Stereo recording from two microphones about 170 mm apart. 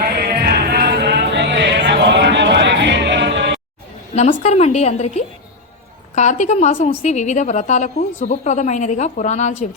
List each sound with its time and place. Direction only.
0.4 s music: 75° right (ahead or behind); by 3.6 s 90° right
4.1 s a woman's voice: 40° left (ahead or behind)